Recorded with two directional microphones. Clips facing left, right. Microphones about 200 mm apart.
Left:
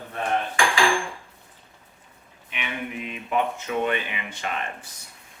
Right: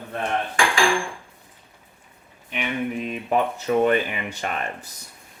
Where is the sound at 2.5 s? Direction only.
40° right (ahead or behind).